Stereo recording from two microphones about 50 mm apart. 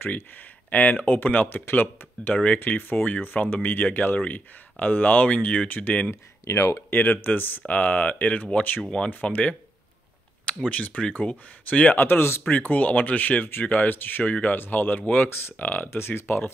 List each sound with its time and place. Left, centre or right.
0.0 s speech: left
2.3 s speech: left
3.5 s speech: left
6.5 s speech: left
6.9 s speech: left
10.7 s speech: left
11.9 s speech: left
12.4 s speech: left
14.2 s speech: left
15.2 s speech: left
15.6 s speech: left
16.0 s speech: left
16.3 s speech: left